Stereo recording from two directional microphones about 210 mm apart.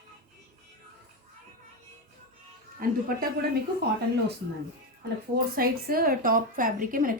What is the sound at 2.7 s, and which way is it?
Speech, 45° right (ahead or behind).